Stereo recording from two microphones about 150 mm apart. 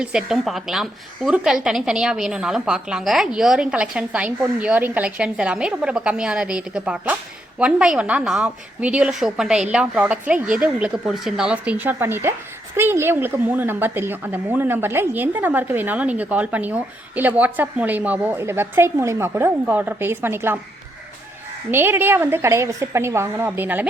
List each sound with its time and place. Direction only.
0.0 s a woman's voice: 5° right (ahead or behind)
21.7 s a woman's voice: 15° right (ahead or behind)